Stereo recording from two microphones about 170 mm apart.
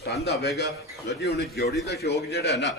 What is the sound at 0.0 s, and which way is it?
A man's voice, 70° left (ahead or behind).